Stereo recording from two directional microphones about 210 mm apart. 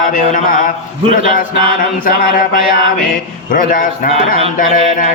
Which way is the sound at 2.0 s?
40° left (ahead or behind).